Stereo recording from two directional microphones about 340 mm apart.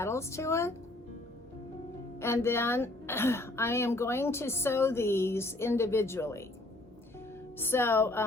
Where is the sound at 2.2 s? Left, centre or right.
Centre.